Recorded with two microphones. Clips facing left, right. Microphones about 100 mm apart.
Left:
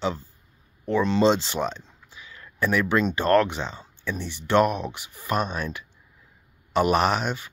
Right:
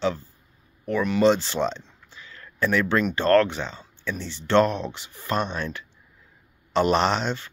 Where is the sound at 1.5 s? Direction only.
5° left (ahead or behind).